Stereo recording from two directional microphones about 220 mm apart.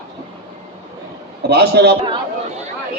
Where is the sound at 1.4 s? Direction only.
50° right (ahead or behind).